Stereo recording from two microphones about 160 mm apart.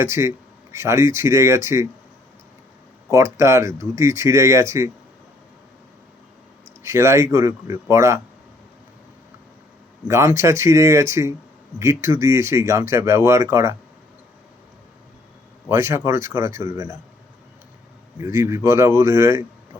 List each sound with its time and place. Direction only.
0.0 s speech: 15° right (ahead or behind)
3.1 s speech: 15° right (ahead or behind)
6.8 s speech: 15° right (ahead or behind)
10.1 s speech: 20° right (ahead or behind)
15.7 s speech: 15° right (ahead or behind)
18.2 s speech: 15° right (ahead or behind)